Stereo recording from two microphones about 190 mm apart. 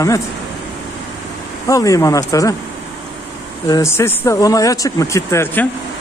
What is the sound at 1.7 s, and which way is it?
Speech, 15° left (ahead or behind).